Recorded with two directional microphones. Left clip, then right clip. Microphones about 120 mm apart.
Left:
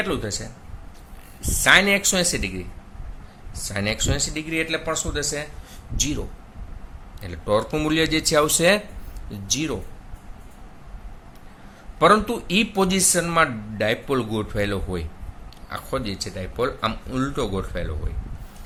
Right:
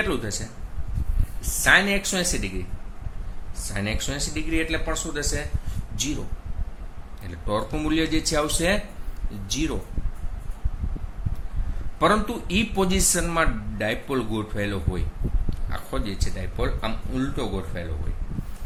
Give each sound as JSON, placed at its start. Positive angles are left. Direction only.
{"t": 0.0, "sound": "speech", "side_deg": 30}
{"t": 1.4, "sound": "a man's voice", "side_deg": 45}
{"t": 3.7, "sound": "a man's voice", "side_deg": 45}
{"t": 7.2, "sound": "speech", "side_deg": 50}
{"t": 9.5, "sound": "a man's voice", "side_deg": 45}
{"t": 11.9, "sound": "a man's voice", "side_deg": 45}